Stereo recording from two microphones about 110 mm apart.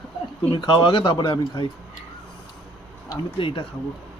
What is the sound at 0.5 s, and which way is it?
Speech, 50° left (ahead or behind).